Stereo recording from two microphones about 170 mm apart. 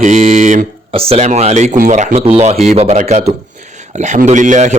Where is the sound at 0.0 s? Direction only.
50° right (ahead or behind).